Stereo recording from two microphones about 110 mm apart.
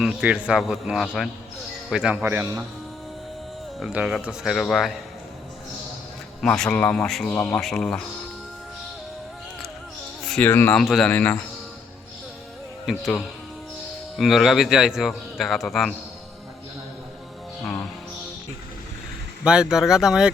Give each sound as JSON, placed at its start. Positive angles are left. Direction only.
{"t": 0.0, "sound": "a man's voice", "side_deg": -5}
{"t": 2.2, "sound": "a man's voice", "side_deg": -20}
{"t": 3.8, "sound": "a man's voice", "side_deg": -5}
{"t": 6.4, "sound": "a man's voice", "side_deg": 10}
{"t": 10.2, "sound": "a sound", "side_deg": 10}
{"t": 10.5, "sound": "speech", "side_deg": 20}
{"t": 10.8, "sound": "a man's voice", "side_deg": 5}
{"t": 12.8, "sound": "speech", "side_deg": 0}
{"t": 14.2, "sound": "a man's voice", "side_deg": 0}
{"t": 17.6, "sound": "music", "side_deg": 10}
{"t": 19.5, "sound": "a man's voice", "side_deg": -5}